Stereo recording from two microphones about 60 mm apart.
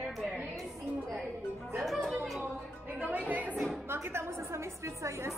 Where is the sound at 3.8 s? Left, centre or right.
Right.